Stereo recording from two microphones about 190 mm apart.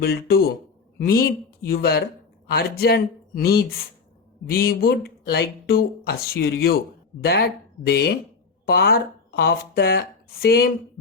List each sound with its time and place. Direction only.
0.0 s speech: 55° left (ahead or behind)